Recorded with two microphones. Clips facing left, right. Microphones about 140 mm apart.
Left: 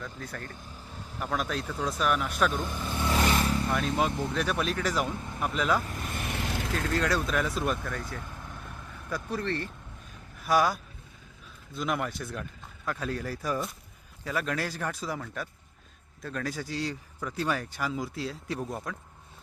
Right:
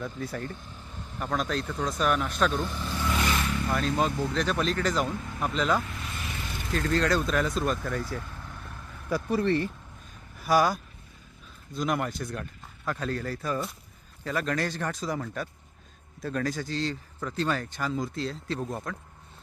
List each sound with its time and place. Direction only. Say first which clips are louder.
0.0 s speech: right 6 dB; 10° right (ahead or behind)
0.7 s speech: even; 5° left (ahead or behind)
3.1 s vehicle: left 3 dB; 35° left (ahead or behind)
3.7 s speech: right 1 dB; centre (ahead or behind)
5.8 s vehicle: left 2 dB; 45° left (ahead or behind)
6.5 s vehicle: left 3 dB; 90° left
6.7 s speech: right 4 dB; 5° left (ahead or behind)
7.9 s speech: right 4 dB; 5° right (ahead or behind)
10.4 s speech: right 2 dB; centre (ahead or behind)